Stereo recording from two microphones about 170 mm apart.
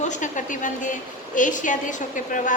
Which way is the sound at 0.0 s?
45° left (ahead or behind).